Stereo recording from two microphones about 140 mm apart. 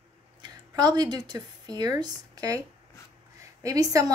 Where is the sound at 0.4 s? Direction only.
30° right (ahead or behind).